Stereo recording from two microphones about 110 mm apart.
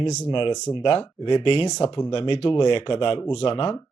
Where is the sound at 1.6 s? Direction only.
40° left (ahead or behind).